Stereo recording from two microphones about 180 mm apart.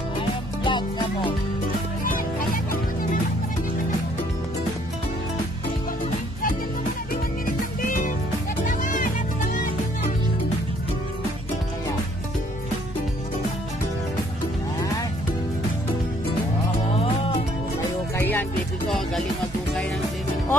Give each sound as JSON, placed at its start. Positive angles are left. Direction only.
{"t": 0.7, "sound": "music", "side_deg": 25}
{"t": 2.0, "sound": "music", "side_deg": 50}
{"t": 7.4, "sound": "music", "side_deg": 50}
{"t": 16.9, "sound": "music", "side_deg": 30}
{"t": 18.9, "sound": "music", "side_deg": 0}